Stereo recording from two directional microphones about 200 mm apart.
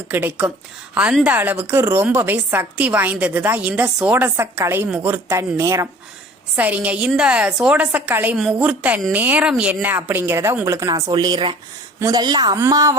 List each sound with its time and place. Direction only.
0.1 s speech: 10° right (ahead or behind)